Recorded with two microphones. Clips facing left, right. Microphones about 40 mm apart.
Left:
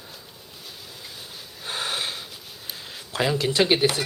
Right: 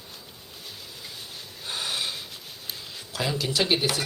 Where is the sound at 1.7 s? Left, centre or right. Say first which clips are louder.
Left 2 dB; left.